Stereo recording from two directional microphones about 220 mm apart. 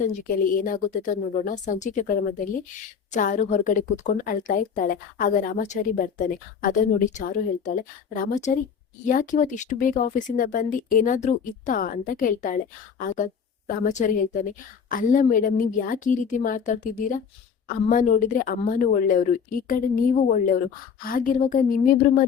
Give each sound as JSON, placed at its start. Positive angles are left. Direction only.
{"t": 0.1, "sound": "a woman's voice", "side_deg": 40}